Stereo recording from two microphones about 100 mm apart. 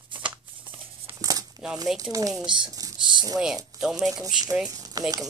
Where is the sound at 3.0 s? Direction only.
50° right (ahead or behind).